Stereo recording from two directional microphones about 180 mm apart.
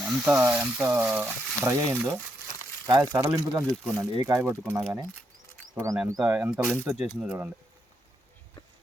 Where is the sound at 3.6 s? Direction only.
Centre (ahead or behind).